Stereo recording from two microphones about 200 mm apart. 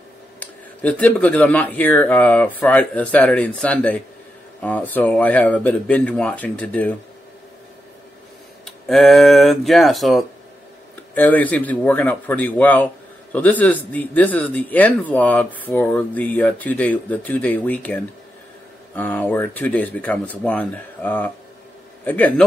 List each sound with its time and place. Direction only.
0.4 s speech: 5° left (ahead or behind)
8.8 s a man's voice: centre (ahead or behind)